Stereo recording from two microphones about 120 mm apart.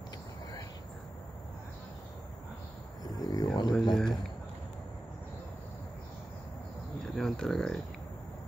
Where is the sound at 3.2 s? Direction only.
35° left (ahead or behind).